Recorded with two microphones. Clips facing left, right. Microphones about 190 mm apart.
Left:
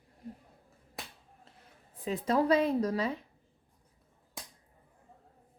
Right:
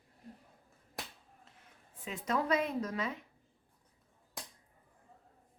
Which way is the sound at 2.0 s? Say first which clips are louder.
Left 6 dB; 35° left (ahead or behind).